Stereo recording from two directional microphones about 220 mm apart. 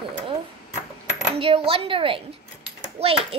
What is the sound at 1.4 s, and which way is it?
Speech, 25° right (ahead or behind).